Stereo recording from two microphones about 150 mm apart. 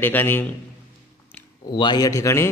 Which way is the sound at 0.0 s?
15° left (ahead or behind).